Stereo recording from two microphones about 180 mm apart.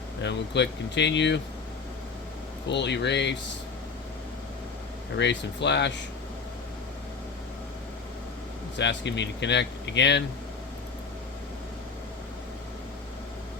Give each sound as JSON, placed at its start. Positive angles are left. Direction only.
{"t": 0.2, "sound": "speech", "side_deg": 75}
{"t": 2.6, "sound": "speech", "side_deg": 75}
{"t": 5.1, "sound": "speech", "side_deg": 75}
{"t": 8.8, "sound": "speech", "side_deg": 75}